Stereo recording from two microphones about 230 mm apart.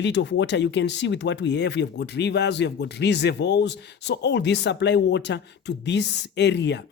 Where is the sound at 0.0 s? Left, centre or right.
Left.